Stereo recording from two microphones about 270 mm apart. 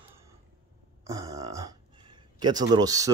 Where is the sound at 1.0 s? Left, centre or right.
Centre.